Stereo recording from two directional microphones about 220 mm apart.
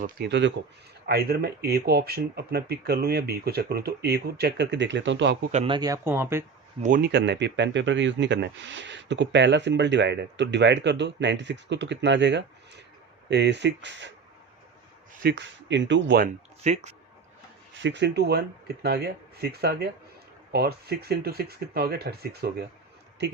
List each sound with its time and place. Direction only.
0.0 s speech: 50° right (ahead or behind)
5.4 s speech: 30° right (ahead or behind); by 6.4 s 10° right (ahead or behind)
6.8 s speech: 40° right (ahead or behind)
15.2 s speech: 50° right (ahead or behind)
16.2 s speech: 30° right (ahead or behind)
17.7 s speech: 55° right (ahead or behind)